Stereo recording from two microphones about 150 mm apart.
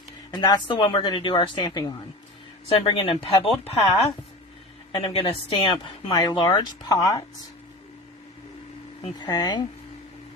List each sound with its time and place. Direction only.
0.3 s speech: 30° left (ahead or behind)
2.6 s speech: 40° left (ahead or behind)
4.9 s a woman's voice: 35° left (ahead or behind)
9.1 s a woman's voice: 30° left (ahead or behind)